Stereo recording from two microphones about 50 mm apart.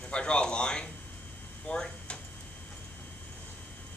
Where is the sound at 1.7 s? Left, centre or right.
Centre.